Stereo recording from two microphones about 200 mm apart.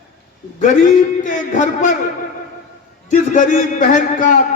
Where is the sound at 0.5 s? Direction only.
40° left (ahead or behind).